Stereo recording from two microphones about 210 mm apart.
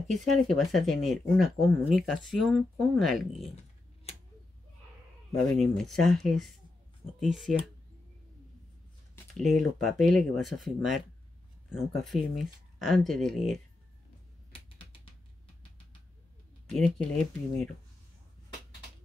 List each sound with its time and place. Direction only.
0.1 s speech: centre (ahead or behind)
5.3 s speech: centre (ahead or behind)
7.5 s speech: 35° left (ahead or behind)
9.3 s speech: centre (ahead or behind)
14.5 s typing: 25° left (ahead or behind)
17.1 s speech: 5° left (ahead or behind)